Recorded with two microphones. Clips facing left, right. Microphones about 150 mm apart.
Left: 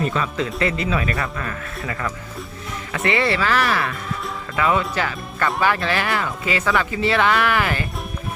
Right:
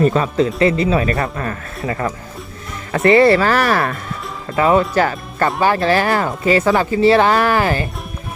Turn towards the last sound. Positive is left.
turn(degrees=-35)  # may be behind; listen again after turning